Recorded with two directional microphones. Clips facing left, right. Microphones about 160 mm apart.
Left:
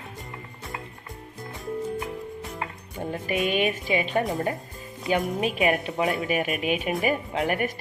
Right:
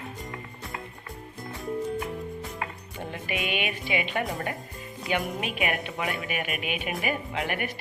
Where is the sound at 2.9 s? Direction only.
40° left (ahead or behind).